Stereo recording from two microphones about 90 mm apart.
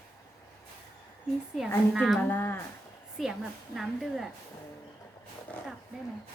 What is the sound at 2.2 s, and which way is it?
Speech, 25° left (ahead or behind).